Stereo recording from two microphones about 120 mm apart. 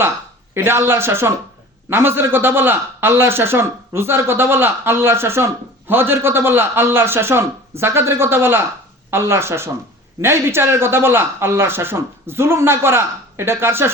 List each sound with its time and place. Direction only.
0.5 s speech: 20° right (ahead or behind)